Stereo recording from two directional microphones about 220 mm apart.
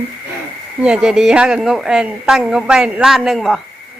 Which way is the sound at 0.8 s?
5° right (ahead or behind).